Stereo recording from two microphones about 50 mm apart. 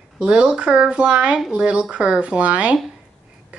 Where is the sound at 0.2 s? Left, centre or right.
Centre.